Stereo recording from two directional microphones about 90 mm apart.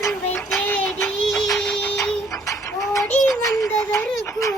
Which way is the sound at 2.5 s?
35° left (ahead or behind).